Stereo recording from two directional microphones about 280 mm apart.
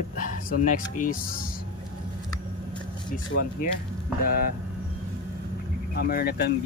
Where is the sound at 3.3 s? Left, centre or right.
Left.